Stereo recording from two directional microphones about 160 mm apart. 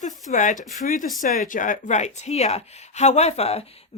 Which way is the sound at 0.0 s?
50° left (ahead or behind).